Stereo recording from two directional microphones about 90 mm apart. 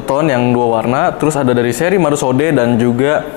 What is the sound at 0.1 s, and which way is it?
Speech, 20° left (ahead or behind).